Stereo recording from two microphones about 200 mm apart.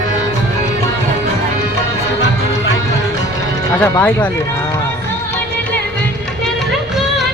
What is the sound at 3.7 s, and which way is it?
Speech, 10° left (ahead or behind).